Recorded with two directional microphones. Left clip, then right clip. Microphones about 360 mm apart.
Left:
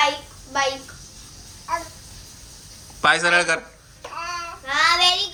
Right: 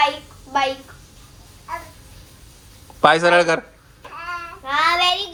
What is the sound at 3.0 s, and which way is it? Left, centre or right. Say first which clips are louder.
Speech: right 4 dB; centre.